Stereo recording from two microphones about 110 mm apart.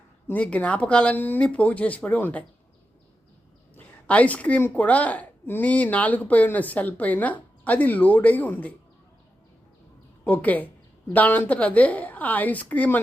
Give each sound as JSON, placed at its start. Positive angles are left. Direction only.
{"t": 0.3, "sound": "a woman's voice", "side_deg": 10}
{"t": 3.8, "sound": "a woman's voice", "side_deg": 10}
{"t": 10.2, "sound": "a woman's voice", "side_deg": 15}